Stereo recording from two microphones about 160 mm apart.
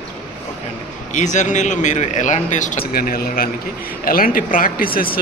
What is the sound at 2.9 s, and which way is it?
Speech, 65° left (ahead or behind).